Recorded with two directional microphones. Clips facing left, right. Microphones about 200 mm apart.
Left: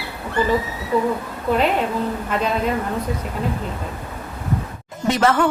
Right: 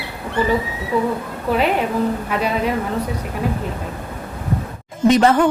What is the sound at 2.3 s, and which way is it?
Speech, 10° right (ahead or behind).